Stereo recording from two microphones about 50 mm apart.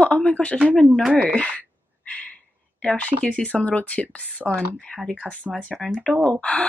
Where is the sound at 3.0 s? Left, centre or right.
Left.